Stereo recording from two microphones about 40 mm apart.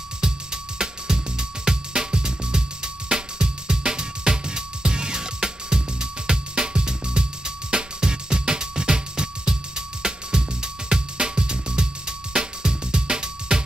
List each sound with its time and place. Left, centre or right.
0.2 s music: centre